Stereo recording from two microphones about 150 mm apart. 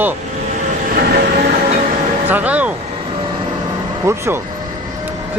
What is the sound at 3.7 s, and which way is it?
Vehicle, 20° right (ahead or behind).